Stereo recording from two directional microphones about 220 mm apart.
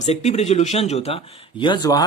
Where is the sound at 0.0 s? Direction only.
30° left (ahead or behind).